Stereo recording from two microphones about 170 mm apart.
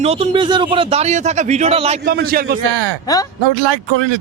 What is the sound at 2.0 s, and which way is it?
Speech, 65° right (ahead or behind).